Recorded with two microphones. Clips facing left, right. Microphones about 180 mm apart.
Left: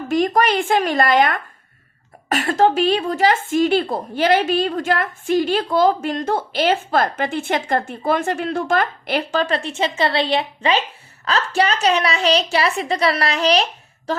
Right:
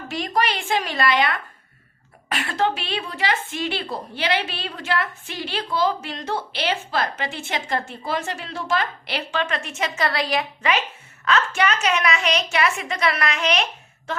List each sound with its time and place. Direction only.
0.1 s a woman's voice: 50° left (ahead or behind)